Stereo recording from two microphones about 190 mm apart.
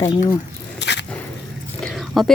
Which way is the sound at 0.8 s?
65° left (ahead or behind).